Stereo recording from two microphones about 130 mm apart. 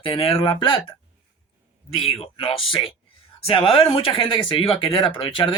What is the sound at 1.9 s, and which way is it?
Speech, 50° left (ahead or behind).